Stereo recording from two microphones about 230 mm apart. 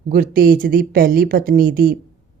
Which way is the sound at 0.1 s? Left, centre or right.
Right.